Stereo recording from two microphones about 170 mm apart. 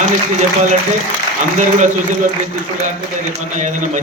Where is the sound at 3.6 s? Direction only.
45° right (ahead or behind).